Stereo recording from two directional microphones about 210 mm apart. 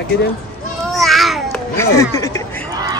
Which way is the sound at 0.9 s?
Centre (ahead or behind).